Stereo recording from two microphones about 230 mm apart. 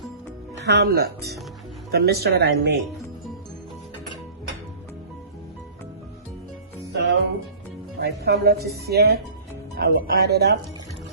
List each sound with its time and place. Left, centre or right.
0.7 s speech: right
6.9 s music: right
7.9 s speech: right